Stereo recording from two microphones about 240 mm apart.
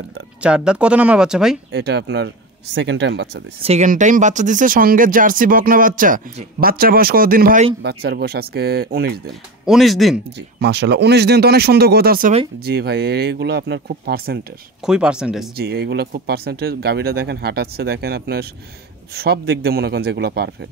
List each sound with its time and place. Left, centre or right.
0.4 s speech: centre
1.7 s speech: right
3.6 s speech: right
9.7 s speech: centre
10.6 s speech: right
14.9 s speech: centre
15.5 s speech: right